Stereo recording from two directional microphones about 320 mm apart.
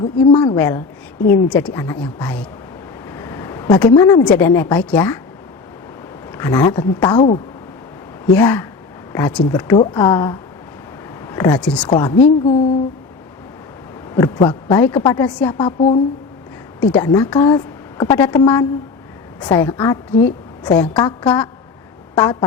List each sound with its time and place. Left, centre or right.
0.0 s a woman's voice: centre
6.3 s a woman's voice: centre
8.4 s a woman's voice: centre
14.1 s a woman's voice: centre
15.5 s a woman's voice: centre
16.8 s a woman's voice: centre